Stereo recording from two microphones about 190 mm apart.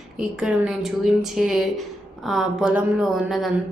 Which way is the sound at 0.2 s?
5° right (ahead or behind).